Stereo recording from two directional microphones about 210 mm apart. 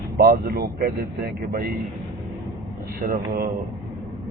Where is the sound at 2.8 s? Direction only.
45° right (ahead or behind).